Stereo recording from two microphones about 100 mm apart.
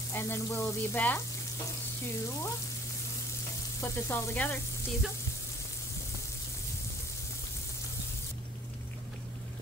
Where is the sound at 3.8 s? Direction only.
25° left (ahead or behind).